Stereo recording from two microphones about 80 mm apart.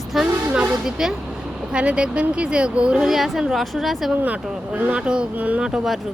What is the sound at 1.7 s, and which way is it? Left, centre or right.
Speech, centre.